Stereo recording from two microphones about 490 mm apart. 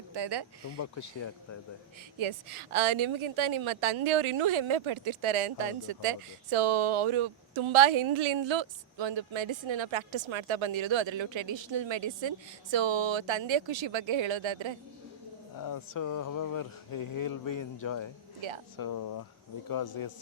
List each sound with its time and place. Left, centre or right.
0.1 s speech: right
2.1 s a woman's voice: right
15.6 s speech: left
18.3 s speech: right
18.8 s speech: left